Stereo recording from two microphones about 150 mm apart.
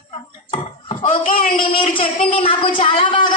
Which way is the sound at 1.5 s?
35° left (ahead or behind).